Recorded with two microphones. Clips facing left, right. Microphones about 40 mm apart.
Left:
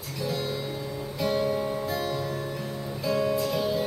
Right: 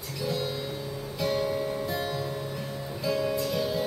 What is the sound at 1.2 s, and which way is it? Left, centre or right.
Guitar, centre.